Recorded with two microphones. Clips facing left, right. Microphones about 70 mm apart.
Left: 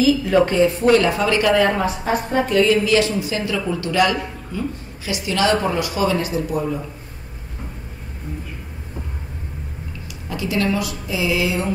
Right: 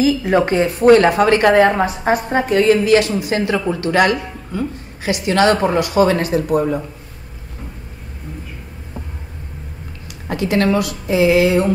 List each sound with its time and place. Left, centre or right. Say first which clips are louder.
0.0 s a woman's voice: right 1 dB; right
10.2 s a woman's voice: right 5 dB; right